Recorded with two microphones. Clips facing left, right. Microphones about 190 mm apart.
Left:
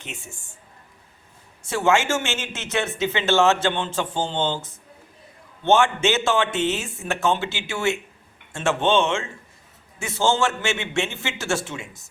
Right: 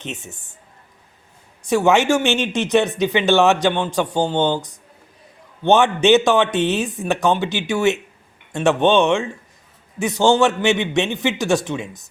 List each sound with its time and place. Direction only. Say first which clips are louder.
0.0 s speech: right 7 dB; 20° right (ahead or behind)
1.6 s speech: right 5 dB; 15° right (ahead or behind)